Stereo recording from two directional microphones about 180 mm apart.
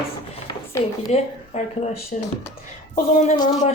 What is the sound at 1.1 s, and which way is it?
Speech, 35° left (ahead or behind).